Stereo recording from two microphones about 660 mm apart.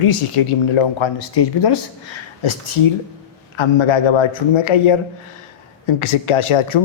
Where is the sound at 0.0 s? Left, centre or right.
Left.